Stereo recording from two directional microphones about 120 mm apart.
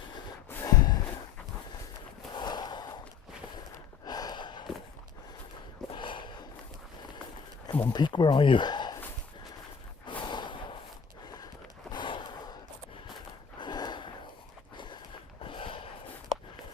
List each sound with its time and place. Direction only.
0.5 s snort: 25° left (ahead or behind)
2.3 s a sound: 35° left (ahead or behind)
4.0 s gasp: 35° left (ahead or behind)
5.9 s a sound: 45° left (ahead or behind)
7.7 s speech: 35° left (ahead or behind)
10.1 s snort: 40° left (ahead or behind)
11.9 s a sound: 40° left (ahead or behind)
13.6 s gasp: 35° left (ahead or behind)
15.4 s snort: 45° left (ahead or behind)